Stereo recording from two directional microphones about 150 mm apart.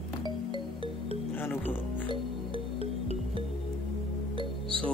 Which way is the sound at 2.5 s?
40° left (ahead or behind).